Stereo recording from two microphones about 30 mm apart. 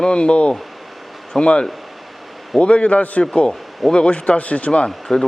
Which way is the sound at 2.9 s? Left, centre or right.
Left.